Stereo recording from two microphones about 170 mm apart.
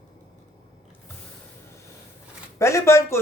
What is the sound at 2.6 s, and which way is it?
Speech, 15° left (ahead or behind).